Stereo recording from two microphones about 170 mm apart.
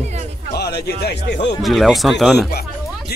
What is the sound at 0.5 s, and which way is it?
Speech, 70° left (ahead or behind).